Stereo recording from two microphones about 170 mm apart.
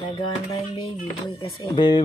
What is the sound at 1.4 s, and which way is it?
Speech, 25° left (ahead or behind).